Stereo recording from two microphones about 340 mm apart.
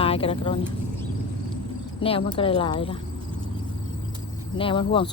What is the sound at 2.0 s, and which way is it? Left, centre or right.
Speech, centre.